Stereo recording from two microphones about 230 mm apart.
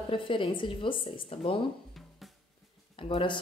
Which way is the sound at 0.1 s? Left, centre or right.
Left.